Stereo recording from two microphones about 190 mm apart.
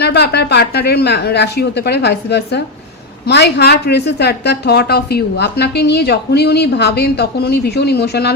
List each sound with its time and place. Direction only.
0.0 s a woman's voice: 60° left (ahead or behind)